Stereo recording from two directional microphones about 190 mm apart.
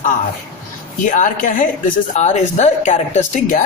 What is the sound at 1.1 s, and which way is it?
Speech, 45° left (ahead or behind).